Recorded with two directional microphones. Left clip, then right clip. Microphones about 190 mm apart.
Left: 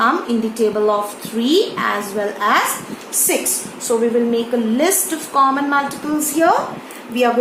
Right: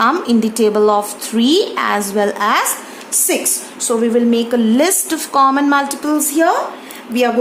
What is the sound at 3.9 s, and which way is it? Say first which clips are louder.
A woman's voice: right 2 dB; 55° right (ahead or behind).